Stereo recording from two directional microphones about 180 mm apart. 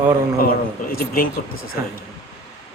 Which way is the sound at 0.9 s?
50° left (ahead or behind).